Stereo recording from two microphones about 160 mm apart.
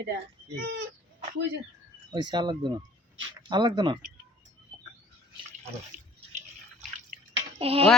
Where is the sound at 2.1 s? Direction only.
30° right (ahead or behind).